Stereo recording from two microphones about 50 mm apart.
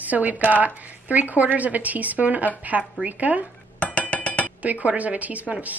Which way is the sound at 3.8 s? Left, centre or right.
Left.